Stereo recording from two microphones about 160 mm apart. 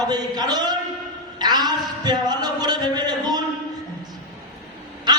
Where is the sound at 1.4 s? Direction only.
25° right (ahead or behind).